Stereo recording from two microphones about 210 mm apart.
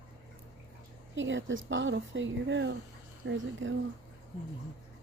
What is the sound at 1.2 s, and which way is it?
A woman's voice, 60° right (ahead or behind).